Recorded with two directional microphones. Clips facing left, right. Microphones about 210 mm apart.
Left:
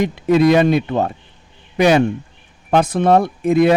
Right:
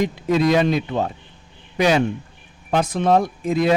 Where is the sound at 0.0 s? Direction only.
60° left (ahead or behind).